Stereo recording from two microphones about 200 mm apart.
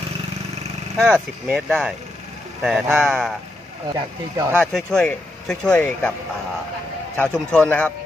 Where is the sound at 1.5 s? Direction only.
Centre (ahead or behind).